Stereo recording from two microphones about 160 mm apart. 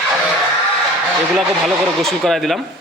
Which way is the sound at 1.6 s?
Centre (ahead or behind).